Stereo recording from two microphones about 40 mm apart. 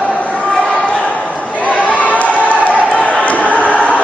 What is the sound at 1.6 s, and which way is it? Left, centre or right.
Crowd, left.